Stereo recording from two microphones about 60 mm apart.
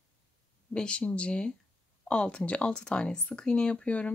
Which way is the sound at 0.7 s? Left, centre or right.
Centre.